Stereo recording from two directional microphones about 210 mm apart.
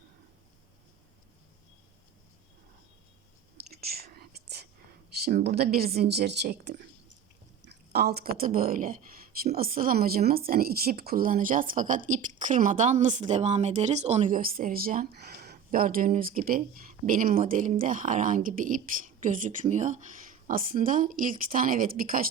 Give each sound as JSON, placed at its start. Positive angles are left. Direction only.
{"t": 3.7, "sound": "whispering", "side_deg": -45}
{"t": 5.1, "sound": "speech", "side_deg": -50}